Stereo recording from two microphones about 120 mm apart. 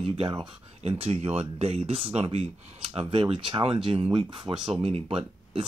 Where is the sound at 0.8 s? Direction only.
55° right (ahead or behind).